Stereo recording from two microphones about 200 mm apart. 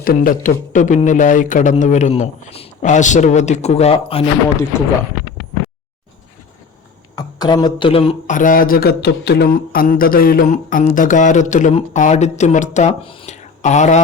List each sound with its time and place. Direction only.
0.0 s speech: 45° left (ahead or behind); by 4.2 s 30° left (ahead or behind)
7.2 s speech: 20° left (ahead or behind)